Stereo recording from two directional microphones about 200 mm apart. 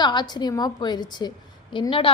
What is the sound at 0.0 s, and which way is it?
A woman's voice, 20° left (ahead or behind).